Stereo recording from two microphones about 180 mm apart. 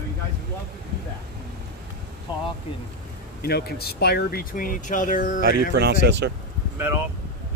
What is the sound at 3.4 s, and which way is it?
Speech, 60° left (ahead or behind).